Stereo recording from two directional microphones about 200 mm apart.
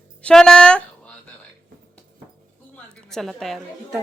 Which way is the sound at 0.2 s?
5° left (ahead or behind).